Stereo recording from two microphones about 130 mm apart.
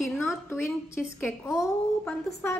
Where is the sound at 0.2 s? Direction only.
20° left (ahead or behind).